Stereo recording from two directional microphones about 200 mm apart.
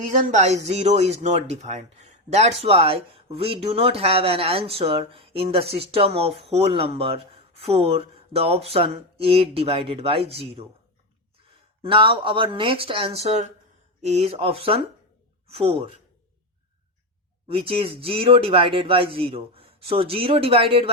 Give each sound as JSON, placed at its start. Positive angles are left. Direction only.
{"t": 0.1, "sound": "speech", "side_deg": -35}
{"t": 11.8, "sound": "speech", "side_deg": -25}
{"t": 17.5, "sound": "speech", "side_deg": -25}